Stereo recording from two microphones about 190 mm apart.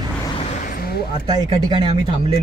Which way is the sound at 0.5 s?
45° left (ahead or behind).